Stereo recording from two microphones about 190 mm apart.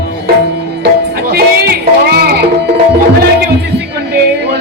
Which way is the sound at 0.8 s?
60° right (ahead or behind).